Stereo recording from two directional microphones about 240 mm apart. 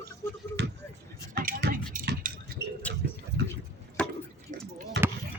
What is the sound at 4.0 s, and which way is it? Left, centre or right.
Drip, centre.